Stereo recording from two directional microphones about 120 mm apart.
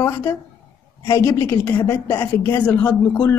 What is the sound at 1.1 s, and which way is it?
A woman's voice, 20° left (ahead or behind).